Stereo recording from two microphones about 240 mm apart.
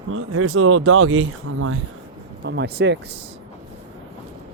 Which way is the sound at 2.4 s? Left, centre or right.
Right.